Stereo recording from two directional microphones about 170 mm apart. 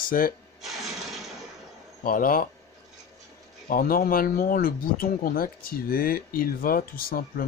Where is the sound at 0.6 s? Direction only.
Centre (ahead or behind).